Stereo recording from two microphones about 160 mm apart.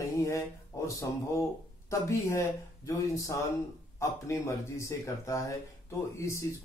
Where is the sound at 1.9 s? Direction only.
20° left (ahead or behind).